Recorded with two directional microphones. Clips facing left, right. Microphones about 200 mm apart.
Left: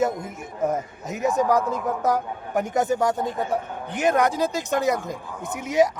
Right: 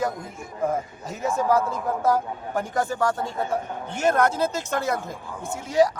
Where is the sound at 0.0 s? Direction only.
20° left (ahead or behind).